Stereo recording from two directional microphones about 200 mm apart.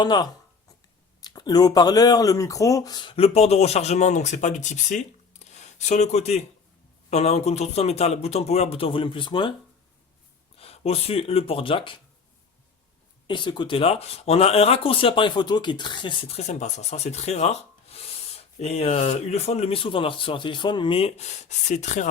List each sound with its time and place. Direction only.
0.0 s speech: 20° left (ahead or behind)
10.6 s speech: 30° left (ahead or behind)
13.2 s speech: 20° left (ahead or behind)